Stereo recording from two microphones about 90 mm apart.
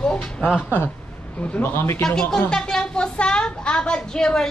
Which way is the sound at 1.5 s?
25° left (ahead or behind).